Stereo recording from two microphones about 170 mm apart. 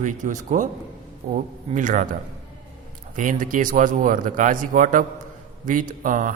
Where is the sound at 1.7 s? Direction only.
50° right (ahead or behind).